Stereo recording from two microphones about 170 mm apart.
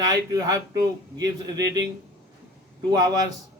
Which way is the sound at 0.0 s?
20° right (ahead or behind).